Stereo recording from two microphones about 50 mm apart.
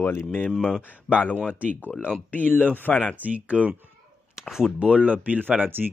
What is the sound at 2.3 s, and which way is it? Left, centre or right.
Speech, left.